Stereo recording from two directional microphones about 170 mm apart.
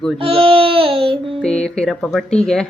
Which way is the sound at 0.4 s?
35° right (ahead or behind).